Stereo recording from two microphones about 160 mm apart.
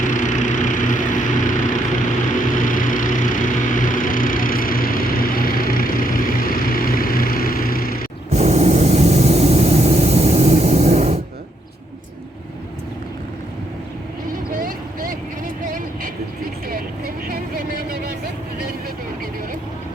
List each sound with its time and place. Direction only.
0.0 s vehicle: 50° left (ahead or behind)
8.3 s a sound: 45° right (ahead or behind)
14.5 s vehicle: 65° right (ahead or behind)